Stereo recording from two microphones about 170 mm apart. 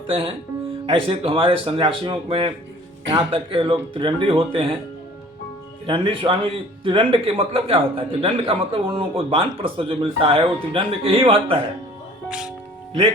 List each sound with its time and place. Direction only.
0.9 s a man's voice: 30° right (ahead or behind)
5.8 s a man's voice: 30° right (ahead or behind)
12.3 s speech: 5° right (ahead or behind)